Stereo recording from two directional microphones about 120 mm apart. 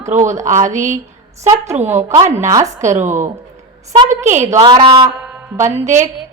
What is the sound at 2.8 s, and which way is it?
Speech, 85° right.